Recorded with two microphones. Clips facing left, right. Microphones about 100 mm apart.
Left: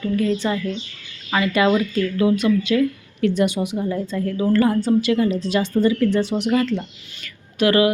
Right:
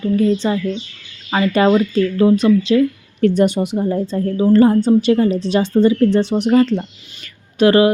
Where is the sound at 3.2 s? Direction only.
40° right (ahead or behind).